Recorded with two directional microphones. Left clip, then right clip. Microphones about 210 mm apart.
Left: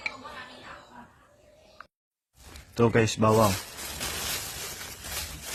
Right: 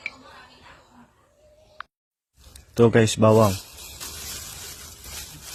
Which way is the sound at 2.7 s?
25° right (ahead or behind).